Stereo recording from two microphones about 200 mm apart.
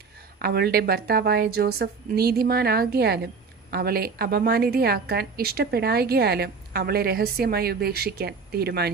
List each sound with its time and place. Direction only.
0.3 s a woman's voice: 50° right (ahead or behind)